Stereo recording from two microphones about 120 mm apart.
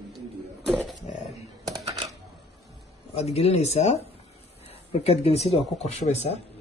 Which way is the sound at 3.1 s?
60° left (ahead or behind).